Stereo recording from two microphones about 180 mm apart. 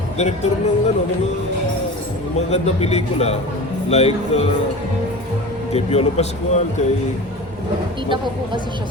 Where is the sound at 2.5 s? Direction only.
35° left (ahead or behind).